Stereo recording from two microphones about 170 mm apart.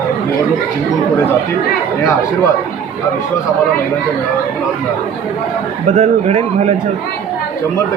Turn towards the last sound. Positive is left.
turn(degrees=-40)  # may be behind; listen again after turning